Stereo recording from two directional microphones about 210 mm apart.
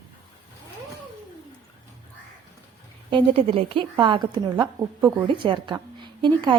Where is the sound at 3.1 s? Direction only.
25° right (ahead or behind).